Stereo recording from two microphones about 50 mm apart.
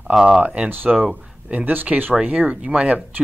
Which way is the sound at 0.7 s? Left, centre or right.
Right.